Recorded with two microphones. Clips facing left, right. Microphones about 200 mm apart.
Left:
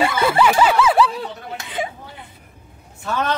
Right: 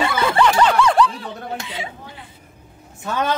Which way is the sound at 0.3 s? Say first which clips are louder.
Right 1 dB; 5° left (ahead or behind).